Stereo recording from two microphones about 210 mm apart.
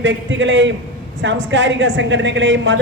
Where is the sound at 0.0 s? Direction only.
60° right (ahead or behind).